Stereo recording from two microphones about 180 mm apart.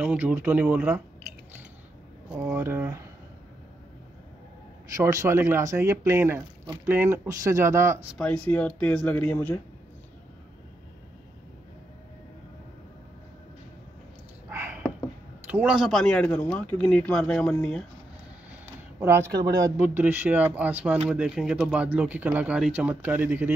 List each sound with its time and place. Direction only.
0.0 s speech: 5° right (ahead or behind)
2.4 s speech: 15° right (ahead or behind)
4.9 s speech: 15° right (ahead or behind)
8.2 s speech: 5° left (ahead or behind)
14.5 s a sound: 10° right (ahead or behind)
15.4 s speech: 10° right (ahead or behind)
18.5 s a sound: 10° right (ahead or behind)
19.8 s speech: 10° right (ahead or behind)